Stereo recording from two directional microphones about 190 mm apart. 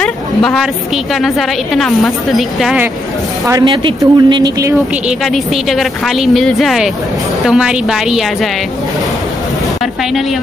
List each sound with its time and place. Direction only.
0.0 s a sound: 5° left (ahead or behind)
1.2 s a woman's voice: centre (ahead or behind)
3.4 s speech: 20° right (ahead or behind)
5.2 s a woman's voice: centre (ahead or behind)